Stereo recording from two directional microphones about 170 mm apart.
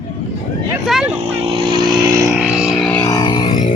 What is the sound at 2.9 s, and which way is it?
Music, 15° left (ahead or behind).